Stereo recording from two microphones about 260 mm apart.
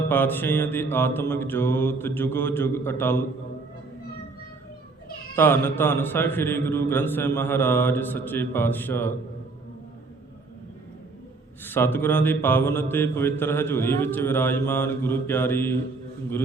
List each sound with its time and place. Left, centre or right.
0.1 s mantra: centre
5.3 s mantra: centre
11.6 s mantra: centre